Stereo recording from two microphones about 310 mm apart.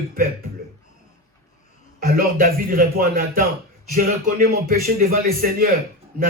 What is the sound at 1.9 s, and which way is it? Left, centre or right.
Speech, right.